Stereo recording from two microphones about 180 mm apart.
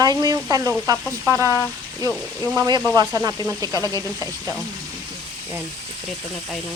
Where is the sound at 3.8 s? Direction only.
20° left (ahead or behind).